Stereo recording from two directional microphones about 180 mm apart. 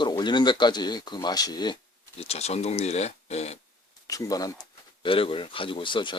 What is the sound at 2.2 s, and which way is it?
Speech, 35° left (ahead or behind).